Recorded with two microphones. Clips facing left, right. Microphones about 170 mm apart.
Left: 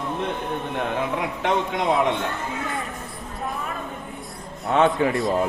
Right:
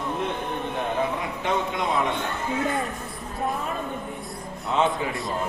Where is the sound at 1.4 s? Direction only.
75° left (ahead or behind).